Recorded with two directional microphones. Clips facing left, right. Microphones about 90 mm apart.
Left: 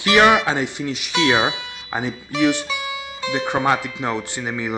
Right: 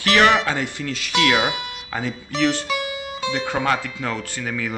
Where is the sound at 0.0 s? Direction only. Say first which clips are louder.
Left 2 dB; 20° left (ahead or behind).